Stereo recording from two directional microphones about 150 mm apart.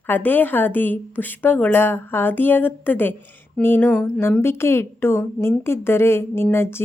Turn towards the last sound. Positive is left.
turn(degrees=15)  # may be behind; listen again after turning